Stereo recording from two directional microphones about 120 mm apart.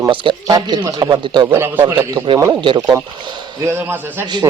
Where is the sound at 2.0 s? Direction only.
40° right (ahead or behind).